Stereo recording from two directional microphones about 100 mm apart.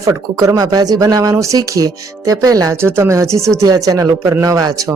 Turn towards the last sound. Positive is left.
turn(degrees=-35)  # may be behind; listen again after turning